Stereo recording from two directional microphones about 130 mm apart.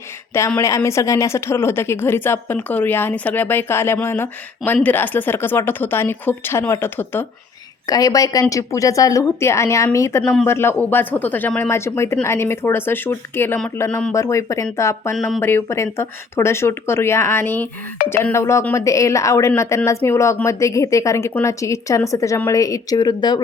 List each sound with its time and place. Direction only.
0.3 s a woman's voice: 20° left (ahead or behind)
7.9 s a woman's voice: 30° left (ahead or behind)
15.1 s speech: 5° left (ahead or behind)
15.4 s speech: 15° left (ahead or behind); by 23.4 s 30° left (ahead or behind)